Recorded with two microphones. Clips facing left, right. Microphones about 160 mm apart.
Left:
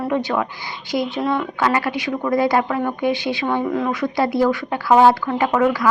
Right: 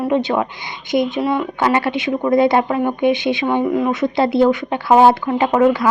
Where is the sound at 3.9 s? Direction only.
25° right (ahead or behind).